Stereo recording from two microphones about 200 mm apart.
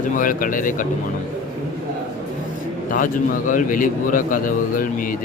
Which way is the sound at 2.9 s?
40° left (ahead or behind).